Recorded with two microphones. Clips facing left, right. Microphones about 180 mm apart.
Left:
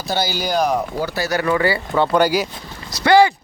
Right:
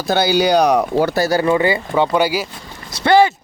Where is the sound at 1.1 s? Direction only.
40° right (ahead or behind).